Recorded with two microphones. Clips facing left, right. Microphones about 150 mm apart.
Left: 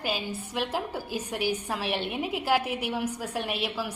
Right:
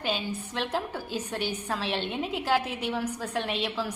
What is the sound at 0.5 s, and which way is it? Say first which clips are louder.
A woman's voice: left 1 dB; 10° left (ahead or behind).